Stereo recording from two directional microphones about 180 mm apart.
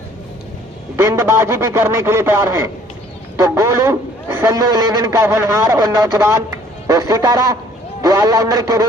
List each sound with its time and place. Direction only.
1.0 s a man's voice: 15° right (ahead or behind)